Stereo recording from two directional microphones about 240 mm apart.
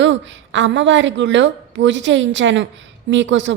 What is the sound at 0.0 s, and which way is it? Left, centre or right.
A woman's voice, right.